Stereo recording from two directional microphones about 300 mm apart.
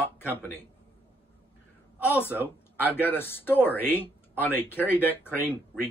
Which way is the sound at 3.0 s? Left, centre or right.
Centre.